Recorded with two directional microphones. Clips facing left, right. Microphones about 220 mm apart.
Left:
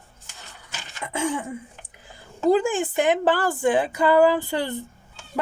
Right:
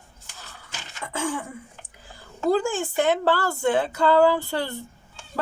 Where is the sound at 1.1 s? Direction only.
20° left (ahead or behind).